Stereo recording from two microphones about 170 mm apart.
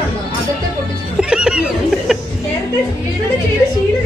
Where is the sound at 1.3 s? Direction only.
5° right (ahead or behind).